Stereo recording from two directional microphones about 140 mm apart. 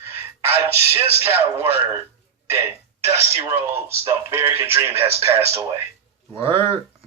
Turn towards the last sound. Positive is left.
turn(degrees=15)  # may be behind; listen again after turning